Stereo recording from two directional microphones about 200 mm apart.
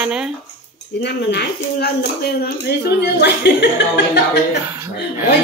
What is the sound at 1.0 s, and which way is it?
A woman's voice, 55° left (ahead or behind).